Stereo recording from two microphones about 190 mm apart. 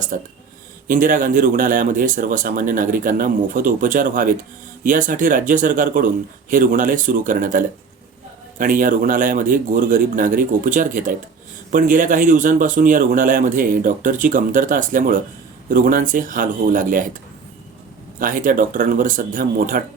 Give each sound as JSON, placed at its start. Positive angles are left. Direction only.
{"t": 0.1, "sound": "speech", "side_deg": -50}
{"t": 18.2, "sound": "speech", "side_deg": -45}